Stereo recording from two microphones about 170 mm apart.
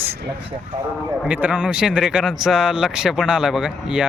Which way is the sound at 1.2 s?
10° right (ahead or behind).